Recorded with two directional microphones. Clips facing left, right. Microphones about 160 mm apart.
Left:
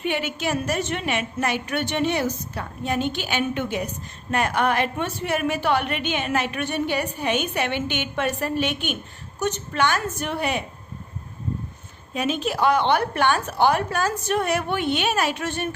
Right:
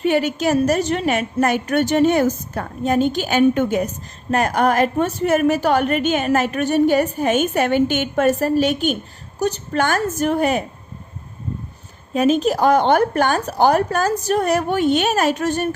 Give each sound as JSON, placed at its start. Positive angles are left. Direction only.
{"t": 0.0, "sound": "a woman's voice", "side_deg": -40}
{"t": 12.1, "sound": "a woman's voice", "side_deg": -40}